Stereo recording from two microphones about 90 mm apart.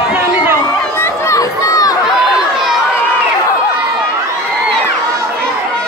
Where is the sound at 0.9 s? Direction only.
35° left (ahead or behind).